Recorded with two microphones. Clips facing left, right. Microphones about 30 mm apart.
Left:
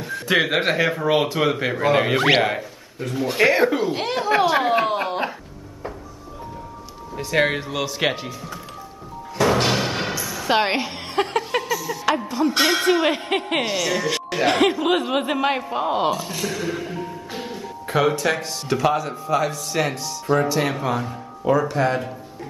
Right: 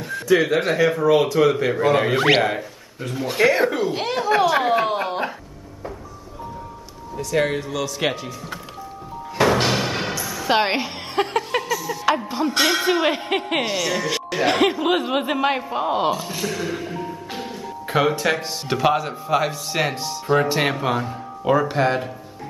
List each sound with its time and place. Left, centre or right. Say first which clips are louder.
0.2 s speech: right 2 dB; left; by 2.1 s centre
2.1 s speech: even; centre
7.2 s speech: left 1 dB; left; by 8.5 s centre
9.5 s music: even; centre
12.4 s speech: left 1 dB; centre
17.8 s a man's voice: even; centre
20.3 s speech: right 2 dB; right; by 22.1 s centre